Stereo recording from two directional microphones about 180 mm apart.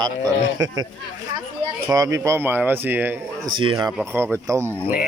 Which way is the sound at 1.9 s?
20° right (ahead or behind).